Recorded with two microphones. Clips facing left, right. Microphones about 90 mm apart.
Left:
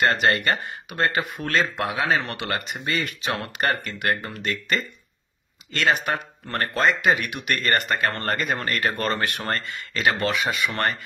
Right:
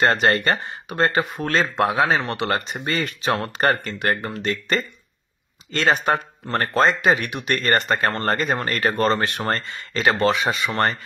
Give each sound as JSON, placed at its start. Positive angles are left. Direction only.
{"t": 0.0, "sound": "speech", "side_deg": -35}